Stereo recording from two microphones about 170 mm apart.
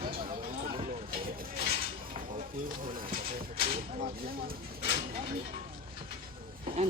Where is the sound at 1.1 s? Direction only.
60° right (ahead or behind).